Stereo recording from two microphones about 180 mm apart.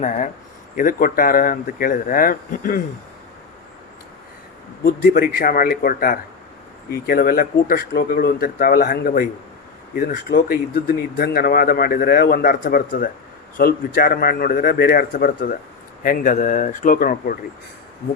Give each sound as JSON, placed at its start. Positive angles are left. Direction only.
{"t": 0.8, "sound": "speech", "side_deg": 50}
{"t": 4.8, "sound": "speech", "side_deg": 60}